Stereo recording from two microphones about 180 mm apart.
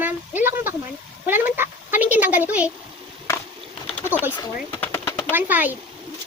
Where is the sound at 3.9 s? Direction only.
10° left (ahead or behind).